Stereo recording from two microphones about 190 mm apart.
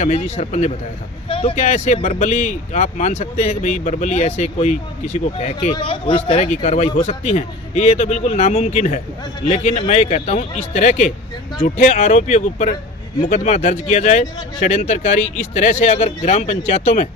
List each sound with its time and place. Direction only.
0.0 s speech: 35° left (ahead or behind)